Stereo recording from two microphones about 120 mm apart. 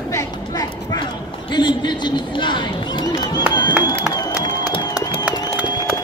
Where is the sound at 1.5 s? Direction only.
40° left (ahead or behind).